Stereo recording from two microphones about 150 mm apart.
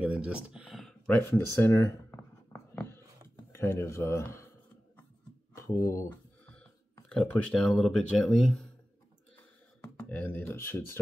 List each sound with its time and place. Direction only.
0.0 s a sound: 5° right (ahead or behind); by 3.0 s 15° left (ahead or behind)
3.5 s speech: 15° left (ahead or behind)
5.6 s speech: 20° left (ahead or behind)
7.1 s speech: 5° left (ahead or behind)
9.9 s speech: 10° left (ahead or behind)